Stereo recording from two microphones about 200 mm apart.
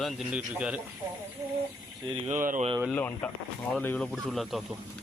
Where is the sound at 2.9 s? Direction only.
10° left (ahead or behind).